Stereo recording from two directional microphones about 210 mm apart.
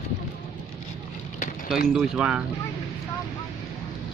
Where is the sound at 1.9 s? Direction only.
5° right (ahead or behind).